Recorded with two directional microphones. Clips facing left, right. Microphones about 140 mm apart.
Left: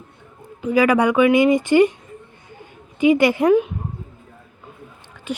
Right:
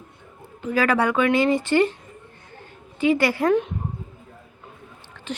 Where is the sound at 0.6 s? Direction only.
15° left (ahead or behind).